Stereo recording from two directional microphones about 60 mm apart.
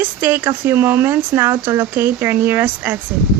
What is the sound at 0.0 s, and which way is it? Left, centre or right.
Speech, right.